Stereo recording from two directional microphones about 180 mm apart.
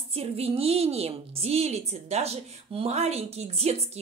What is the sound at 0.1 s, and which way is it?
A woman's voice, 35° right (ahead or behind).